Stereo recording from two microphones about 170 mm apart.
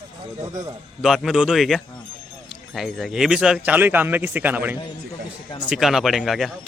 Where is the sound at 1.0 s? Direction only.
Centre (ahead or behind).